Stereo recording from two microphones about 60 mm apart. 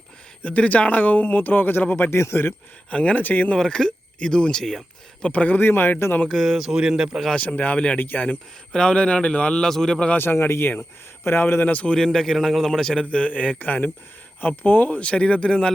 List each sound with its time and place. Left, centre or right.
0.4 s speech: left
2.0 s speech: left
2.9 s speech: centre
3.5 s a man's voice: centre
5.3 s speech: left
6.2 s speech: centre
6.7 s speech: centre
7.3 s speech: left
7.9 s speech: left
8.7 s a man's voice: centre
10.2 s speech: left
11.6 s speech: left
11.9 s a man's voice: centre